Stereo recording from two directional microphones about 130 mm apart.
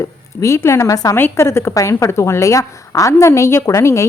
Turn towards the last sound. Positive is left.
turn(degrees=20)  # may be behind; listen again after turning